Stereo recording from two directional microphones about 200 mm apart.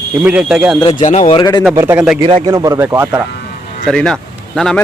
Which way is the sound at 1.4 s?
20° left (ahead or behind).